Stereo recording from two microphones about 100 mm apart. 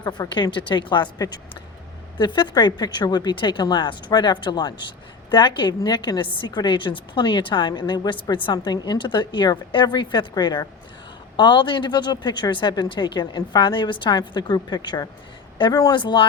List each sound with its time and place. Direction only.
0.0 s speech: 45° left (ahead or behind)
8.5 s speech: 45° left (ahead or behind)